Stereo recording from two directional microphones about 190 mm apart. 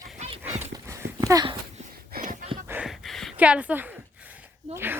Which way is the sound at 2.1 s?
45° right (ahead or behind).